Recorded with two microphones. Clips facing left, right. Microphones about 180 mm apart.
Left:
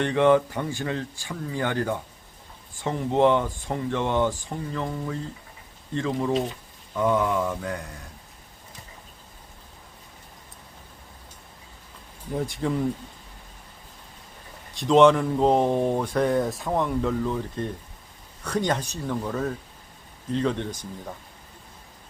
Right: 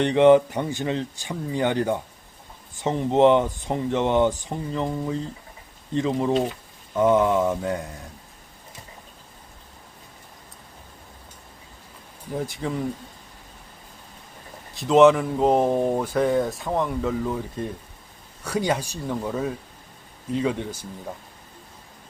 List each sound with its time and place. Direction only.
0.0 s speech: 20° right (ahead or behind)
12.3 s speech: centre (ahead or behind)
14.7 s speech: 5° right (ahead or behind)